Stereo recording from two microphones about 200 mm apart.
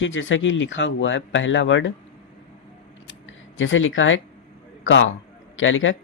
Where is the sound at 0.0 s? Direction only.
70° left (ahead or behind).